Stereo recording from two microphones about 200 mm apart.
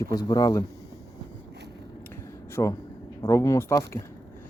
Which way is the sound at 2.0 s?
15° left (ahead or behind).